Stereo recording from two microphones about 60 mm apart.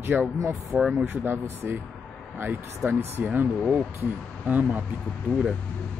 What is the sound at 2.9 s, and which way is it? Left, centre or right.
Speech, right.